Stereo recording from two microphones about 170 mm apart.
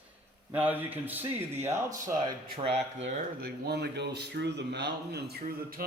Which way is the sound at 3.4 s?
70° right (ahead or behind).